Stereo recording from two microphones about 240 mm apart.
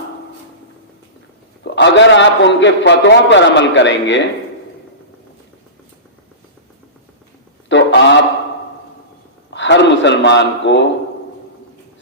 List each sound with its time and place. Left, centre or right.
1.6 s a man's voice: left
7.7 s a sound: left
9.5 s a man's voice: left